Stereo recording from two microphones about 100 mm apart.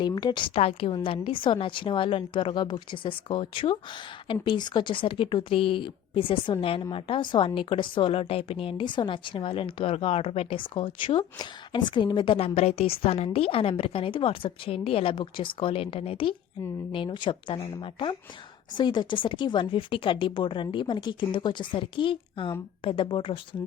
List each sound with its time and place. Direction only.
0.1 s a woman's voice: 45° left (ahead or behind)
0.6 s a woman's voice: 75° left (ahead or behind)
1.0 s a woman's voice: 65° left (ahead or behind)
11.3 s a woman's voice: 50° left (ahead or behind)